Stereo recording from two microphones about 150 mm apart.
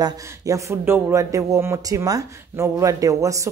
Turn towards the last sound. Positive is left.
turn(degrees=-20)  # may be behind; listen again after turning